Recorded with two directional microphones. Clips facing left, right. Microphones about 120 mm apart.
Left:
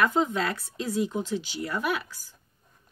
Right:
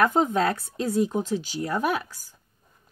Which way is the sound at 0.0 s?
45° right (ahead or behind).